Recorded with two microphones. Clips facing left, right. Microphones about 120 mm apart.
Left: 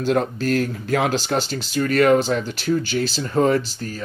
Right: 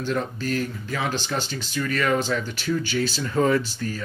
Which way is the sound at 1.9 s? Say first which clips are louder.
Left 8 dB; 60° left (ahead or behind).